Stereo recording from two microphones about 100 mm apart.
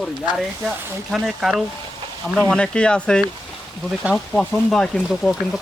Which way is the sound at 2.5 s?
10° left (ahead or behind).